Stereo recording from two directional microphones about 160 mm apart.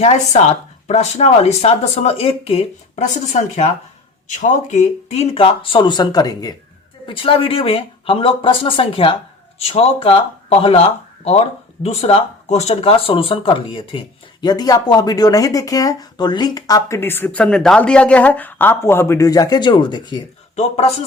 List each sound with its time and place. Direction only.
0.0 s speech: 45° left (ahead or behind); by 6.5 s 25° left (ahead or behind)
7.1 s speech: 35° left (ahead or behind)